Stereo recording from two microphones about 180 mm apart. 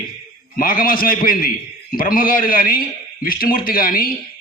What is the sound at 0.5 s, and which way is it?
Speech, 50° left (ahead or behind).